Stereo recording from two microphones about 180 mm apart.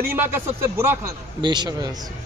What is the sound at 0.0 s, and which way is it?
A man's voice, 10° right (ahead or behind).